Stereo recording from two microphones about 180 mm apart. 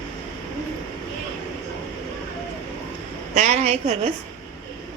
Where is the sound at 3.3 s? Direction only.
35° right (ahead or behind).